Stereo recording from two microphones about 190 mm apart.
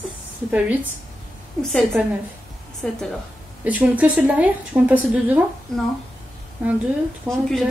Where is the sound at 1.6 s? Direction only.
Centre (ahead or behind).